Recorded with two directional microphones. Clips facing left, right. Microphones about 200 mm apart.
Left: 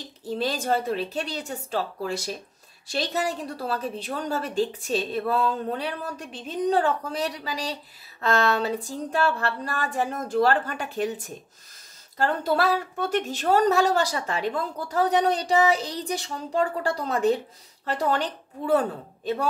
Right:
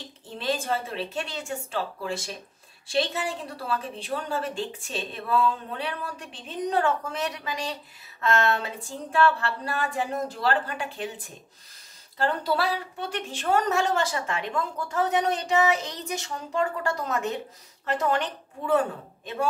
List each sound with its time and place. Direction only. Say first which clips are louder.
0.2 s a woman's voice: left 2 dB; 40° left (ahead or behind)